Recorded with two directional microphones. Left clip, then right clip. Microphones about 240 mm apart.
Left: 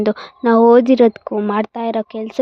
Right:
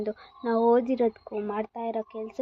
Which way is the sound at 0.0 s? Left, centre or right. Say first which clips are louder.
Left 14 dB; left.